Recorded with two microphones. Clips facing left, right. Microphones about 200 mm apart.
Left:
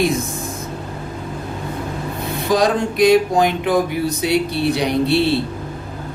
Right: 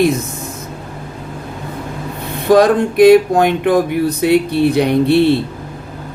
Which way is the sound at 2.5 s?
55° right (ahead or behind).